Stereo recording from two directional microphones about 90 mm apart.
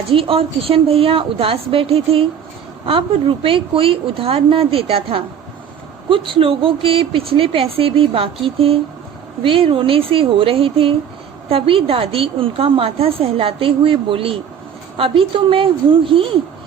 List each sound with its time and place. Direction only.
0.1 s a woman's voice: 90° right
6.1 s a woman's voice: 75° right (ahead or behind)